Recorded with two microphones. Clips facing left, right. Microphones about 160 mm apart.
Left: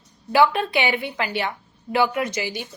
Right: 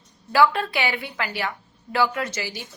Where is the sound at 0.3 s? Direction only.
20° left (ahead or behind).